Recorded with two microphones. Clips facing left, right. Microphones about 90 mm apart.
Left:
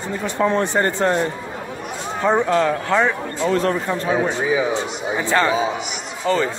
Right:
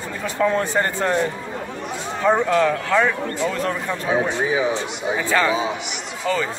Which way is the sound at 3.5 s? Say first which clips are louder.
Left 5 dB; 40° left (ahead or behind).